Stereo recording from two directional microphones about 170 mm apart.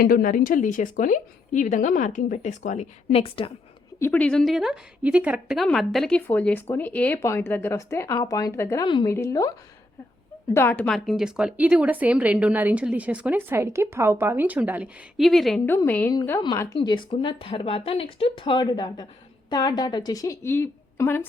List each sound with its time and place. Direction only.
0.0 s a woman's voice: 55° left (ahead or behind); by 3.5 s 30° left (ahead or behind)
4.0 s a woman's voice: 10° left (ahead or behind)
10.5 s a woman's voice: 10° left (ahead or behind)
15.6 s a woman's voice: 15° left (ahead or behind)